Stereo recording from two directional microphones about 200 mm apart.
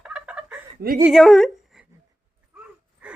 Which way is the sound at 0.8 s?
50° right (ahead or behind).